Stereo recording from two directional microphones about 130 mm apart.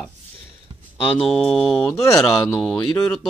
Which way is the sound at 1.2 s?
Centre (ahead or behind).